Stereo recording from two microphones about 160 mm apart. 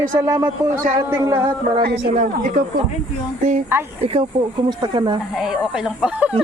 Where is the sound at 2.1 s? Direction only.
50° right (ahead or behind).